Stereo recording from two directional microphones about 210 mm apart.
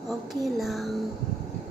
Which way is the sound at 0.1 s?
Centre (ahead or behind).